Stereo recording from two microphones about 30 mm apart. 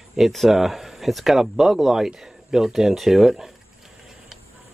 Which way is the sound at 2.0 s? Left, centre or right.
Centre.